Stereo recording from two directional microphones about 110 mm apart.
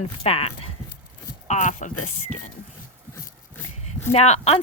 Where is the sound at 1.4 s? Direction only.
90° left.